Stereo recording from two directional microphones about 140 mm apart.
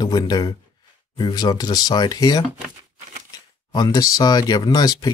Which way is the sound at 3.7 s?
30° left (ahead or behind).